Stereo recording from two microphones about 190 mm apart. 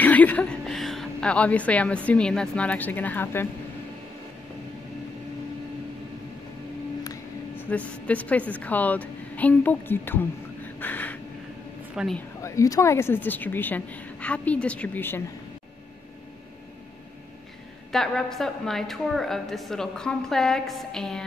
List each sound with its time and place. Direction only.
0.0 s a woman's voice: 10° left (ahead or behind)
7.0 s a woman's voice: 15° left (ahead or behind)
10.8 s a sound: 10° left (ahead or behind)
11.9 s speech: 5° right (ahead or behind)
12.4 s a woman's voice: 15° left (ahead or behind)
17.9 s a woman's voice: centre (ahead or behind)